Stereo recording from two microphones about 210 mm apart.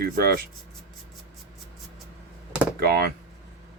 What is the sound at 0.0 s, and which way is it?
Speech, 45° right (ahead or behind).